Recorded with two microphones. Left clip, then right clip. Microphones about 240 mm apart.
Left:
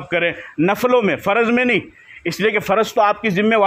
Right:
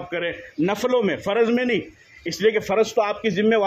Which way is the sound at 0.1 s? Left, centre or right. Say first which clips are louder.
Left 9 dB; left.